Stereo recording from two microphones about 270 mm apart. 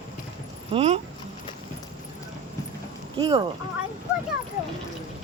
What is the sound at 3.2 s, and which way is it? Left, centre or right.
Speech, centre.